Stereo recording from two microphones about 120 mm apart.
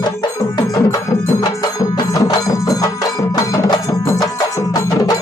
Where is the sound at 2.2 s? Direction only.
30° left (ahead or behind).